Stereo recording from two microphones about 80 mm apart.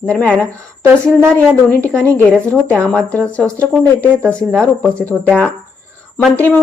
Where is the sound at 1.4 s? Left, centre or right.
Centre.